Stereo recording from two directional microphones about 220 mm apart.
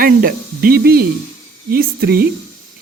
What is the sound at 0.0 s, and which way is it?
Speech, 40° right (ahead or behind).